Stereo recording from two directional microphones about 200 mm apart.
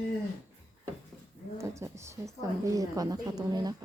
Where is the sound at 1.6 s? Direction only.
15° right (ahead or behind).